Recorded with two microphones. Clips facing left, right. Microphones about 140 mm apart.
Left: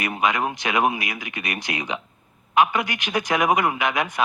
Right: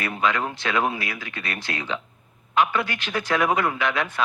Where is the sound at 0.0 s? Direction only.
15° left (ahead or behind).